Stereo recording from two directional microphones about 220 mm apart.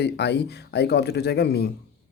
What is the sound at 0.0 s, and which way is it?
Speech, 50° left (ahead or behind).